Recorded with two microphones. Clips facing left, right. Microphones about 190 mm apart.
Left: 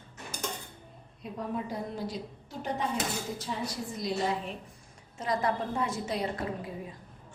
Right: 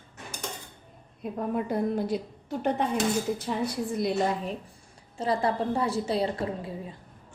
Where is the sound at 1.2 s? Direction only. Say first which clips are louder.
Right 6 dB; 60° right (ahead or behind).